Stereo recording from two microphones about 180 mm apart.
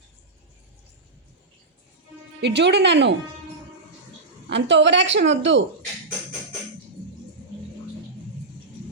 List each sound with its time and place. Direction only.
2.4 s speech: 70° right (ahead or behind)
4.4 s a woman's voice: 80° right